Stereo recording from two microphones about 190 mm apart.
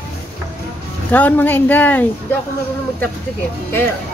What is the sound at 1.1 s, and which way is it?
Speech, 10° left (ahead or behind).